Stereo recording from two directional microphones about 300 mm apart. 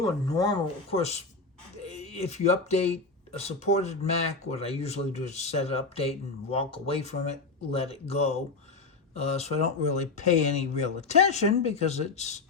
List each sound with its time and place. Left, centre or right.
0.0 s speech: centre